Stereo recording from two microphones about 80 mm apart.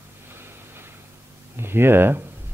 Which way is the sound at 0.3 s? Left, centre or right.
Right.